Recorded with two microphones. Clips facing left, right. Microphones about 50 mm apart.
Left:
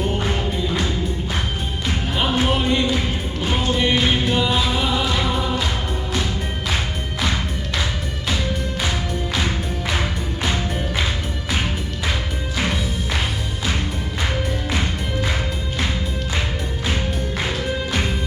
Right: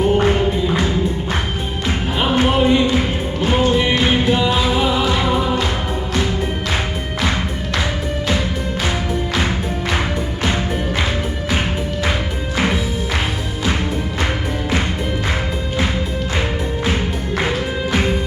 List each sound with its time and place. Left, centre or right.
0.2 s music: right
2.3 s music: centre
16.9 s music: centre